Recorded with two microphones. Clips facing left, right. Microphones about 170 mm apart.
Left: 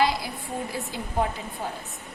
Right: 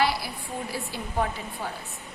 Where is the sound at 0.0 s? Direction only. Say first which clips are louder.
Left 2 dB; 20° left (ahead or behind).